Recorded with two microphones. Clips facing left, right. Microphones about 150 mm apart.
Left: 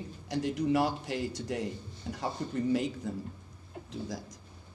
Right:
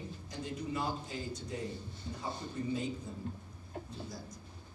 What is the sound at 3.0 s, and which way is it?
Speech, 90° left.